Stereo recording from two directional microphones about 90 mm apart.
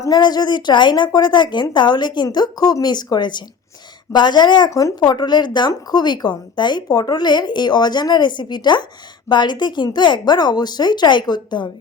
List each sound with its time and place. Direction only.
0.0 s a woman's voice: 50° left (ahead or behind)
4.7 s speech: 35° left (ahead or behind)
4.9 s a woman's voice: 55° left (ahead or behind)